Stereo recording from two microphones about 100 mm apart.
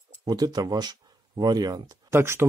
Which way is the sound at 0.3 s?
40° right (ahead or behind).